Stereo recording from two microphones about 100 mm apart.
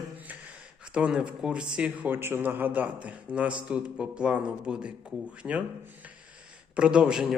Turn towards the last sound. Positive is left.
turn(degrees=-5)  # may be behind; listen again after turning